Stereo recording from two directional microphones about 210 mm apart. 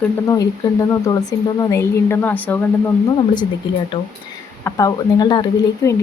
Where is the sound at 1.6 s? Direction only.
15° left (ahead or behind).